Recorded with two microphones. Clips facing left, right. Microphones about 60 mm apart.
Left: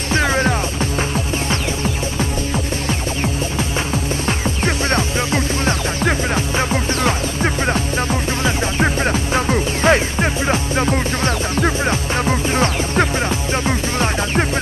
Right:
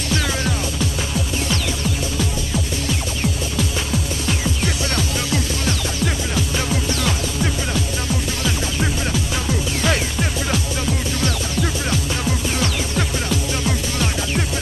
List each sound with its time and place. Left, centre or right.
0.1 s music: left
2.9 s music: left